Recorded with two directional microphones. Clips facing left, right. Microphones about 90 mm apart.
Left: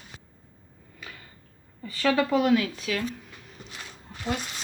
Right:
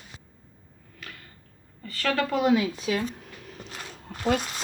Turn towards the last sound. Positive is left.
turn(degrees=-60)  # may be behind; listen again after turning